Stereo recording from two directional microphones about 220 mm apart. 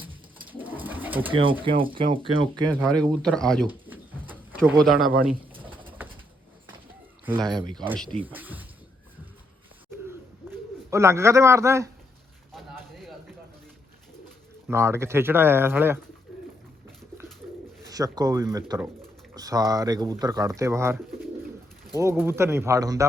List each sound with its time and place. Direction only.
0.5 s bird: 10° right (ahead or behind)
1.3 s speech: 25° right (ahead or behind)
2.8 s speech: 5° left (ahead or behind)
3.7 s pigeon: 10° right (ahead or behind)
7.3 s speech: 20° right (ahead or behind)
7.9 s speech: 5° left (ahead or behind)
8.2 s speech: 10° right (ahead or behind)
10.9 s speech: 15° right (ahead or behind)
12.5 s a sound: centre (ahead or behind)
14.7 s speech: 10° right (ahead or behind)
17.8 s speech: 15° right (ahead or behind)